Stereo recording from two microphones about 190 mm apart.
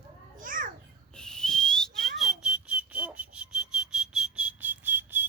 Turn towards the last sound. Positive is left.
turn(degrees=-10)  # may be behind; listen again after turning